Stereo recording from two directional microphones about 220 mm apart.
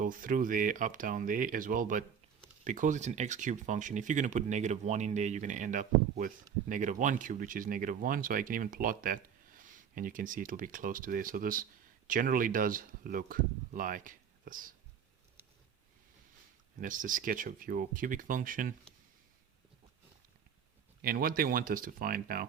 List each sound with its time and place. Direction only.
0.0 s speech: 40° right (ahead or behind)
16.8 s speech: 35° right (ahead or behind)
21.0 s speech: 40° right (ahead or behind)